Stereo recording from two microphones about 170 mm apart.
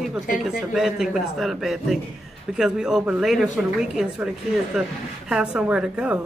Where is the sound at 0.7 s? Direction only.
Centre (ahead or behind).